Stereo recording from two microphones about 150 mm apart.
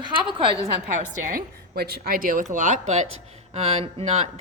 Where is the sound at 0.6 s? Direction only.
65° right (ahead or behind); by 4.3 s 45° right (ahead or behind).